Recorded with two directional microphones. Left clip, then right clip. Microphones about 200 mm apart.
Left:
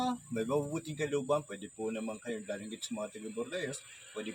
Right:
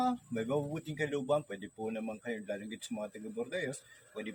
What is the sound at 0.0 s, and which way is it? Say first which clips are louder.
Speech: right 1 dB; centre (ahead or behind).